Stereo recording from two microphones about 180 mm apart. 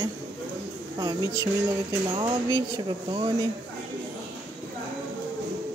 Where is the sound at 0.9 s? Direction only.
20° right (ahead or behind).